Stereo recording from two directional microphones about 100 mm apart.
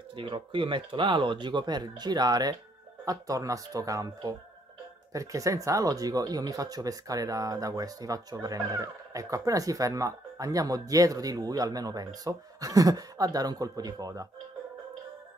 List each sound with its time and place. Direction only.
0.1 s speech: 55° right (ahead or behind); by 14.2 s 40° right (ahead or behind)